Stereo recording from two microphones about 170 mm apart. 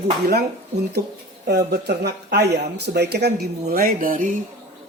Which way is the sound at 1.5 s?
75° right (ahead or behind).